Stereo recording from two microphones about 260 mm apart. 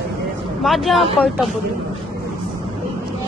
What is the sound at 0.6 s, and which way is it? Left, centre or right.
Speech, centre.